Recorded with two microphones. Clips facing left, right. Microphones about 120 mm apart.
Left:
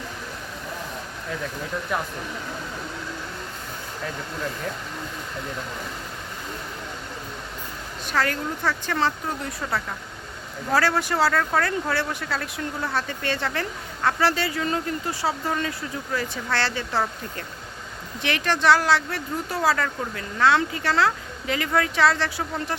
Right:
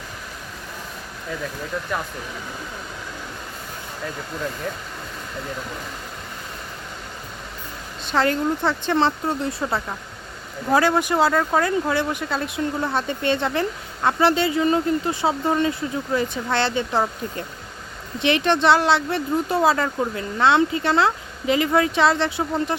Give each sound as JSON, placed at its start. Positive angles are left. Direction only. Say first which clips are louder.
{"t": 8.0, "sound": "speech", "louder": "right 5 dB", "side_deg": -25}